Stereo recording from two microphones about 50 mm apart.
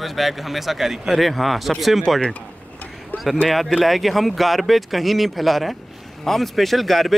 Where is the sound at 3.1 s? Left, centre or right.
Left.